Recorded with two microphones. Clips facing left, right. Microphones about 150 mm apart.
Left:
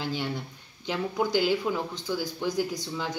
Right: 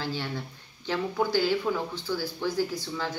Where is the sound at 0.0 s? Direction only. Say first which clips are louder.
Left 1 dB; 15° left (ahead or behind).